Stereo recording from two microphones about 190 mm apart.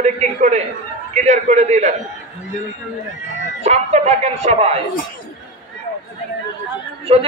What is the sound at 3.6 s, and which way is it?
A man's voice, 35° right (ahead or behind).